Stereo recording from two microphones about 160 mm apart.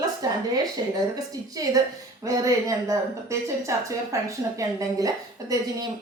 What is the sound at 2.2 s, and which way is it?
Speech, 20° right (ahead or behind).